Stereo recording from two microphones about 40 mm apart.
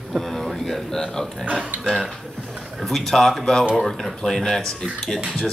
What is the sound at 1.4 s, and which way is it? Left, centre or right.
Speech, right.